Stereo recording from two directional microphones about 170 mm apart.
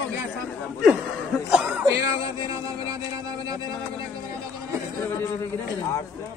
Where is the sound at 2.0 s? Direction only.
20° right (ahead or behind).